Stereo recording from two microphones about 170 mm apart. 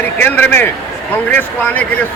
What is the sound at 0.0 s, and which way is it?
Speech, 10° left (ahead or behind).